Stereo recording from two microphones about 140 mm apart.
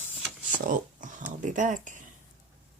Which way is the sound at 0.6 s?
65° right (ahead or behind).